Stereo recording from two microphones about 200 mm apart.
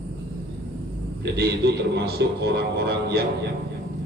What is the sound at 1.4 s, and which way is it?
A man's voice, 55° right (ahead or behind).